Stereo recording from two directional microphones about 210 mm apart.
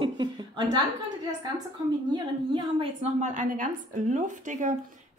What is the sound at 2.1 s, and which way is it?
A woman's voice, 25° right (ahead or behind).